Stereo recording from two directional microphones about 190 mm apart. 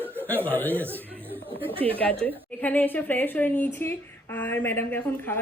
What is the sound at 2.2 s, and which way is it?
A woman's voice, 10° left (ahead or behind).